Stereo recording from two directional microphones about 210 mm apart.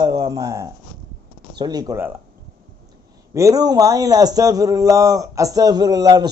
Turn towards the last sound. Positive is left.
turn(degrees=-20)  # may be behind; listen again after turning